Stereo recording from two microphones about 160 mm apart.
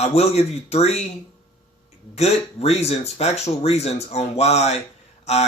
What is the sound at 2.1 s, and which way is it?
Speech, 45° left (ahead or behind).